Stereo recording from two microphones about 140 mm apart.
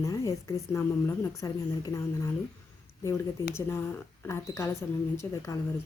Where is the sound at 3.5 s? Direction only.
20° left (ahead or behind).